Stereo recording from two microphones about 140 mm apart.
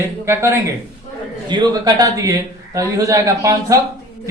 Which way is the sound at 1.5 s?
30° right (ahead or behind).